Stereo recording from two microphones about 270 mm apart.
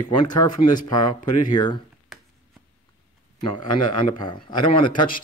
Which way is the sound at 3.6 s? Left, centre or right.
Centre.